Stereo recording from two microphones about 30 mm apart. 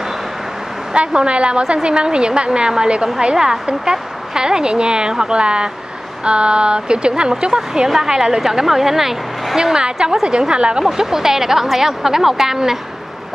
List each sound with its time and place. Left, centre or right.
0.9 s a woman's voice: right; by 9.6 s centre
9.6 s speech: right
10.8 s a woman's voice: centre